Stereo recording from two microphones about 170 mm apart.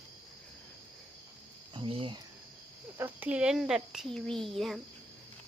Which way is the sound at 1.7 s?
30° right (ahead or behind).